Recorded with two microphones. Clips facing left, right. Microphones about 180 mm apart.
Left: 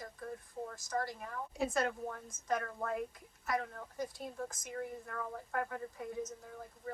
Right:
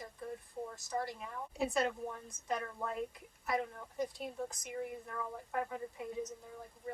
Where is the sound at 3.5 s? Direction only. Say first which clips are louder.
Right 1 dB; 20° right (ahead or behind).